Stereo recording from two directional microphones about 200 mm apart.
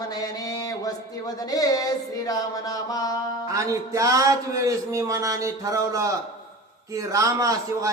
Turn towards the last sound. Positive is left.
turn(degrees=-15)  # may be behind; listen again after turning